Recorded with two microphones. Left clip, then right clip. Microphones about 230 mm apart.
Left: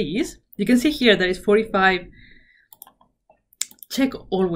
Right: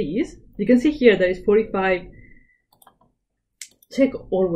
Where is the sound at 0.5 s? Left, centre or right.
Centre.